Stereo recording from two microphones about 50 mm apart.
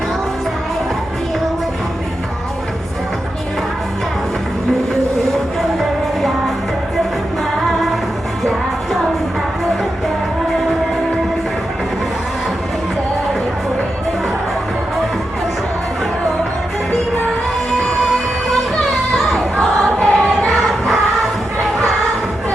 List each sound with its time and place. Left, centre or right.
8.4 s music: centre
19.5 s choir: left